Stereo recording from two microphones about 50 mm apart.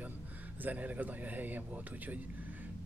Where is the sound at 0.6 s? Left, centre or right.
Right.